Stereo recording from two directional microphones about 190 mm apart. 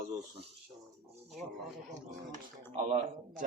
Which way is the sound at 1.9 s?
40° right (ahead or behind).